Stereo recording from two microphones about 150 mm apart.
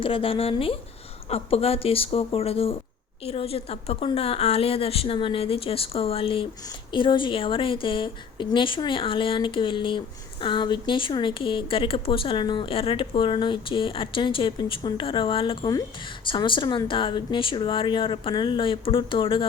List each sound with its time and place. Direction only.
0.0 s speech: 35° left (ahead or behind)